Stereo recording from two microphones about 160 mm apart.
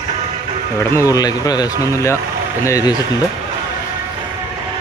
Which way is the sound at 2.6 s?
20° left (ahead or behind).